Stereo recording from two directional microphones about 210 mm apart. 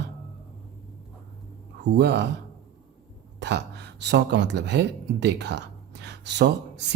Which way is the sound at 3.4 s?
55° right (ahead or behind).